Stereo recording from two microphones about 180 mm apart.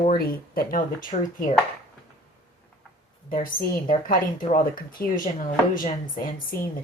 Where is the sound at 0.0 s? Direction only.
55° left (ahead or behind).